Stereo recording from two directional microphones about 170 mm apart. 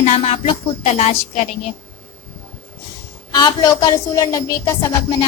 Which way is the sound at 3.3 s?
25° left (ahead or behind).